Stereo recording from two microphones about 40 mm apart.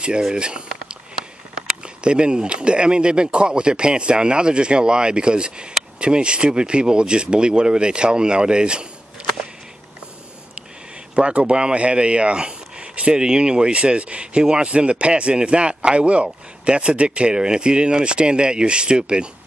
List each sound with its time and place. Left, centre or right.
0.2 s speech: right
2.0 s speech: right
11.1 s speech: right